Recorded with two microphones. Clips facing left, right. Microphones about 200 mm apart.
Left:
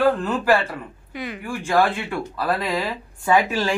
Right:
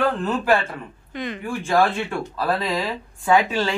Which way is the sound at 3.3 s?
10° left (ahead or behind).